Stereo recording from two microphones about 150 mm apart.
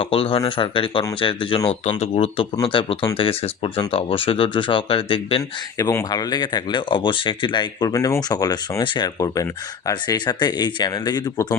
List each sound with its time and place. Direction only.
0.0 s speech: 40° left (ahead or behind)
5.7 s speech: 20° left (ahead or behind)